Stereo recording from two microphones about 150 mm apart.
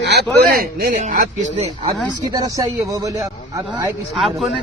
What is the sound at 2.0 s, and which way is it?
Speech, 25° right (ahead or behind).